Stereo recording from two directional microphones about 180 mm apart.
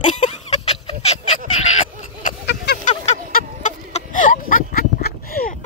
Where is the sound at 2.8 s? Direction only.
40° left (ahead or behind).